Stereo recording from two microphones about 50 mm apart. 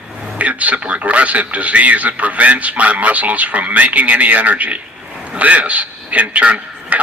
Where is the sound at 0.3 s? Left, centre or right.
Right.